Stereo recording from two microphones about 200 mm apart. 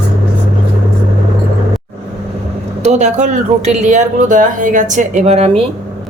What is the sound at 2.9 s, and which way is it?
Speech, 35° right (ahead or behind).